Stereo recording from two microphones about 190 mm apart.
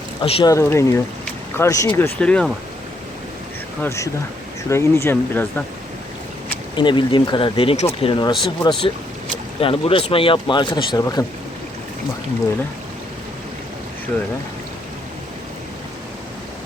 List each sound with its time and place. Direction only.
0.2 s speech: 25° left (ahead or behind)
0.5 s speech: 15° left (ahead or behind)
3.8 s speech: 15° left (ahead or behind)
6.7 s speech: 25° left (ahead or behind)